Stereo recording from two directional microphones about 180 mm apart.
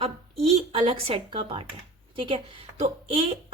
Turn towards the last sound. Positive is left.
turn(degrees=-35)  # may be behind; listen again after turning